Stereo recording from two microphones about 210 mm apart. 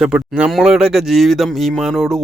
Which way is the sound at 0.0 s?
5° right (ahead or behind).